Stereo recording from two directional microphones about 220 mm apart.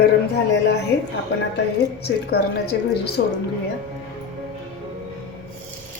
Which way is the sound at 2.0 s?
45° left (ahead or behind).